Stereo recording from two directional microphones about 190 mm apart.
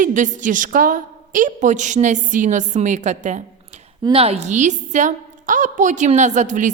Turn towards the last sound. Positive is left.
turn(degrees=-40)  # may be behind; listen again after turning